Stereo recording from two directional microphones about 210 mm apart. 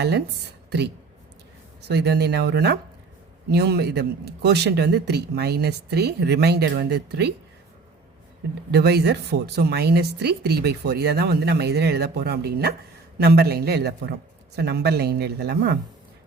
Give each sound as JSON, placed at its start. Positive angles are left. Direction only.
{"t": 1.9, "sound": "speech", "side_deg": -50}
{"t": 8.7, "sound": "speech", "side_deg": -50}